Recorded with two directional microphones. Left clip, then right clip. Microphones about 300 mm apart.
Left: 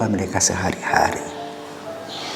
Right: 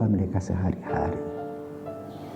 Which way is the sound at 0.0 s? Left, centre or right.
Centre.